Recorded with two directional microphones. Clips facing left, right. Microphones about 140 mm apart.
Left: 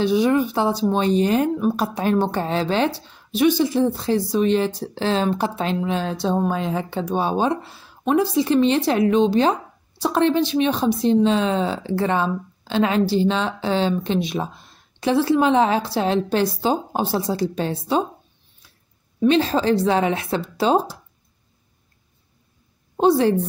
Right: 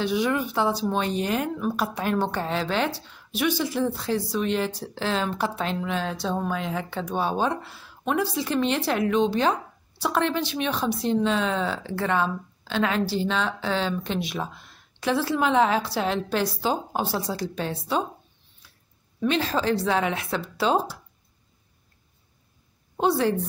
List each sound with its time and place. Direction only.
0.0 s a woman's voice: 30° left (ahead or behind)
19.2 s a woman's voice: 25° left (ahead or behind)
22.9 s a woman's voice: 25° left (ahead or behind)